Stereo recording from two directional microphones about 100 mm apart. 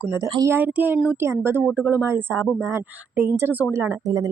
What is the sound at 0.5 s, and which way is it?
Speech, 15° right (ahead or behind).